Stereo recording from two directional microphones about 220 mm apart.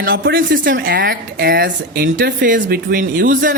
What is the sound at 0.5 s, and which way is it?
Speech, 40° right (ahead or behind).